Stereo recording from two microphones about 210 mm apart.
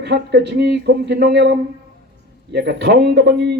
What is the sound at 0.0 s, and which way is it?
A man's voice, 55° right (ahead or behind).